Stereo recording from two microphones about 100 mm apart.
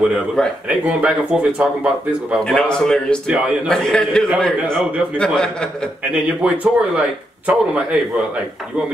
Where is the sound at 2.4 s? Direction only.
5° left (ahead or behind).